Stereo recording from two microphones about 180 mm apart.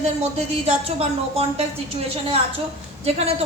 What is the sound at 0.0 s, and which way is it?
Speech, 35° right (ahead or behind).